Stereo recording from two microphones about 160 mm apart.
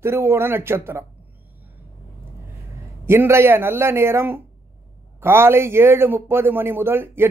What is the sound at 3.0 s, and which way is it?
A man's voice, 15° right (ahead or behind).